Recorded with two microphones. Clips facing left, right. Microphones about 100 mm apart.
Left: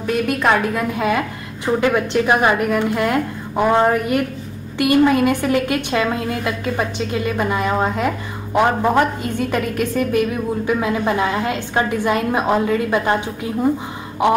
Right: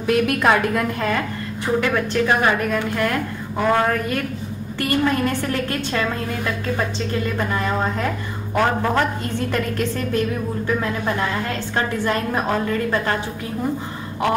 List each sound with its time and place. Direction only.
0.0 s a woman's voice: centre (ahead or behind); by 13.2 s 15° left (ahead or behind)
14.2 s a woman's voice: 20° left (ahead or behind)